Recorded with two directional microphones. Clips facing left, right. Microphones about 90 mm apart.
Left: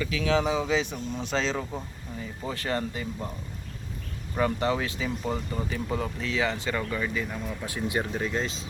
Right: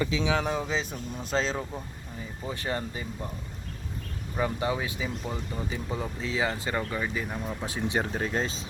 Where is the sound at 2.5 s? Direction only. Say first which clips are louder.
Left 2 dB; 20° right (ahead or behind).